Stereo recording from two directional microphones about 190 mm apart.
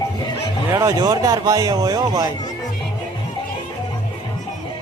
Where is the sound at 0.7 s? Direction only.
15° right (ahead or behind).